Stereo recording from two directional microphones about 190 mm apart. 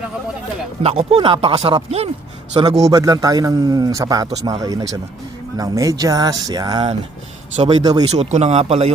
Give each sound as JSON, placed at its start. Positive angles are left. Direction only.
{"t": 0.8, "sound": "a man's voice", "side_deg": -35}
{"t": 8.0, "sound": "speech", "side_deg": -35}